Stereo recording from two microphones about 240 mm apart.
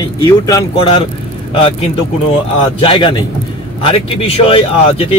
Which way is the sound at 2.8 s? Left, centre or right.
Left.